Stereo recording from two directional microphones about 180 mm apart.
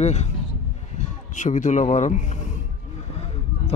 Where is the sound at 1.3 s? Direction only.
45° left (ahead or behind).